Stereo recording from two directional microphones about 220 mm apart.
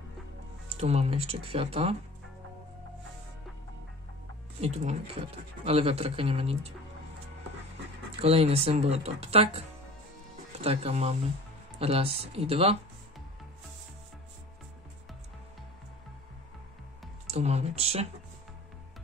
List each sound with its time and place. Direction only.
0.7 s speech: 30° right (ahead or behind)
4.6 s speech: 30° right (ahead or behind)
8.2 s speech: 25° right (ahead or behind)
17.3 s speech: 30° right (ahead or behind)